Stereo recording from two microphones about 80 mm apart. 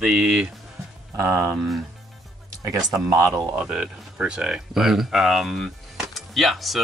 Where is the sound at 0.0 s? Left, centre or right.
Centre.